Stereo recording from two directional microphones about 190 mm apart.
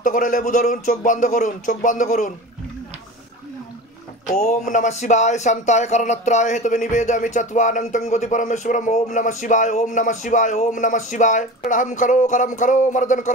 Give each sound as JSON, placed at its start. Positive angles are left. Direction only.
{"t": 0.0, "sound": "speech", "side_deg": 45}
{"t": 4.3, "sound": "speech", "side_deg": 40}